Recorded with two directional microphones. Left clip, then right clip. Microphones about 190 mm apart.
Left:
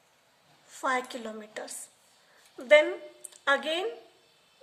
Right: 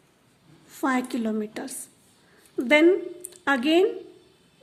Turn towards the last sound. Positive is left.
turn(degrees=-30)  # may be behind; listen again after turning